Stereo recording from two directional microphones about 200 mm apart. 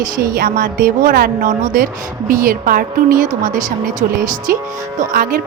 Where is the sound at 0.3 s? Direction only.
45° right (ahead or behind).